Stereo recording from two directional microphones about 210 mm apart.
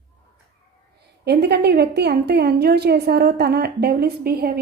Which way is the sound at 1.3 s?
50° right (ahead or behind).